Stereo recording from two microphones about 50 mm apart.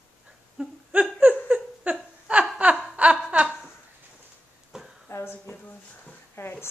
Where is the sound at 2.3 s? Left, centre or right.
Right.